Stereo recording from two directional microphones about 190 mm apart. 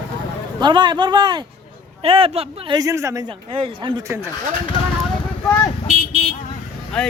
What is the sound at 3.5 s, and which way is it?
Speech, 25° right (ahead or behind).